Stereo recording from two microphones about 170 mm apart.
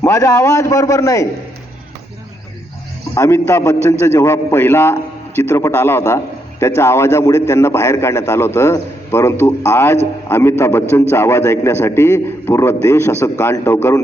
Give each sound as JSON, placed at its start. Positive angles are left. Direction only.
{"t": 0.0, "sound": "a man's voice", "side_deg": 20}
{"t": 3.2, "sound": "a man's voice", "side_deg": 15}